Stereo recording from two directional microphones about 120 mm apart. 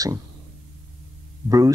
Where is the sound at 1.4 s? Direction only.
30° right (ahead or behind).